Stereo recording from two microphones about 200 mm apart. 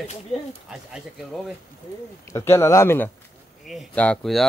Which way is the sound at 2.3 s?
15° left (ahead or behind).